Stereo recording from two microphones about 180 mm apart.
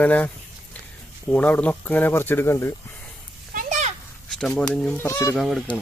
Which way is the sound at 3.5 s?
45° right (ahead or behind).